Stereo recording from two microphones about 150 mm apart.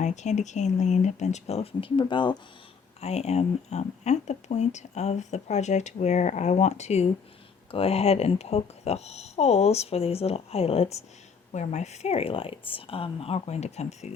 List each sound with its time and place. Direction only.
0.0 s speech: 50° left (ahead or behind); by 2.4 s 30° left (ahead or behind)
3.0 s a woman's voice: 45° left (ahead or behind)